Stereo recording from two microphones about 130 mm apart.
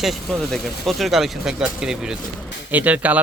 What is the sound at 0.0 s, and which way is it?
Speech, centre (ahead or behind).